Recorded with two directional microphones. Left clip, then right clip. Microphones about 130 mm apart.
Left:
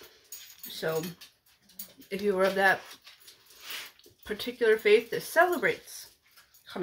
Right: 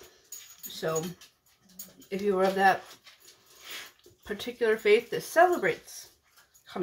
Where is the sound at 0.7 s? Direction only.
Centre (ahead or behind).